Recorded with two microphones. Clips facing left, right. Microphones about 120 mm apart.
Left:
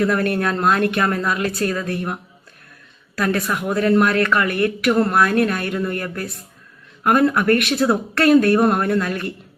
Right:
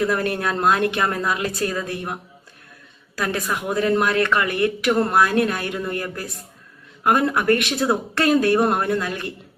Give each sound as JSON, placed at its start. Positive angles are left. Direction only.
{"t": 0.0, "sound": "speech", "side_deg": -25}
{"t": 3.5, "sound": "speech", "side_deg": -20}